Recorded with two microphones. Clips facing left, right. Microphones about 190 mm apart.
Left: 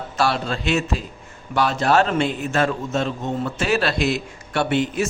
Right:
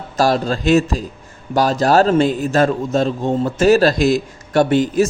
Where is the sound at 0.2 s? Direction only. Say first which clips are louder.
Right 6 dB; 40° right (ahead or behind).